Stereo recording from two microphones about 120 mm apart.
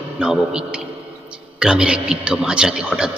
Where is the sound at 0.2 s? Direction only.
5° right (ahead or behind).